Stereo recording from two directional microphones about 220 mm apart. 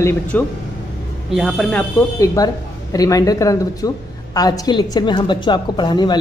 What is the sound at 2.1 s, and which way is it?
A woman's voice, 15° left (ahead or behind).